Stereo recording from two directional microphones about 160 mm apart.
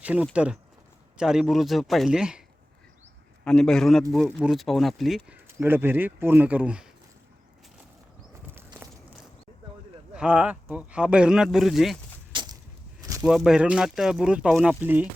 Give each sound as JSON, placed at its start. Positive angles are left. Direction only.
{"t": 0.0, "sound": "speech", "side_deg": -10}
{"t": 3.4, "sound": "speech", "side_deg": 5}
{"t": 5.5, "sound": "speech", "side_deg": -15}
{"t": 8.8, "sound": "walk", "side_deg": -15}
{"t": 10.2, "sound": "speech", "side_deg": -5}
{"t": 12.3, "sound": "a sound", "side_deg": -30}
{"t": 13.2, "sound": "speech", "side_deg": -5}